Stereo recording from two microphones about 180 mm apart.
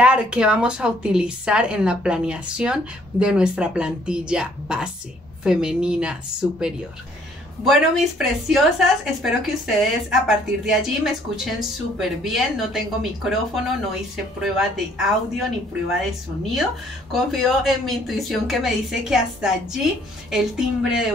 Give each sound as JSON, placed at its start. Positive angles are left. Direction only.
{"t": 0.0, "sound": "a woman's voice", "side_deg": -5}
{"t": 7.6, "sound": "a woman's voice", "side_deg": 0}
{"t": 17.1, "sound": "a woman's voice", "side_deg": 0}